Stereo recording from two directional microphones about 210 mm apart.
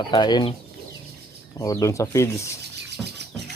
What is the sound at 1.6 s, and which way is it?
Speech, 15° left (ahead or behind).